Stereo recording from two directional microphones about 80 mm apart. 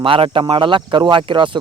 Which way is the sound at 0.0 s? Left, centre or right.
Right.